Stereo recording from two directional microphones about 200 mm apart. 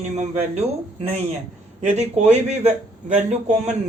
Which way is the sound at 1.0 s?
30° right (ahead or behind).